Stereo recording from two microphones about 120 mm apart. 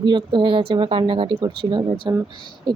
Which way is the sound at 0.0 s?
40° right (ahead or behind).